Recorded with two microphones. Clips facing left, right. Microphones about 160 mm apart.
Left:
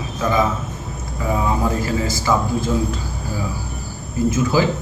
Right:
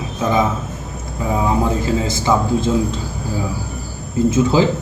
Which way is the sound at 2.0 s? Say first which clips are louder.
Right 2 dB; 25° right (ahead or behind).